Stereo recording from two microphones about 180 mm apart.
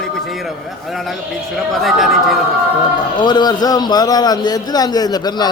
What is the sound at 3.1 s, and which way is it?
A man's voice, 25° left (ahead or behind).